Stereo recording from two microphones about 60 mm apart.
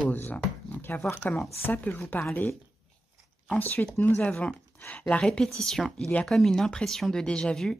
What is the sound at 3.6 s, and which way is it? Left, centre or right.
Speech, left.